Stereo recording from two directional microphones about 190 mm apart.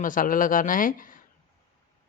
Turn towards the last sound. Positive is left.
turn(degrees=45)  # may be behind; listen again after turning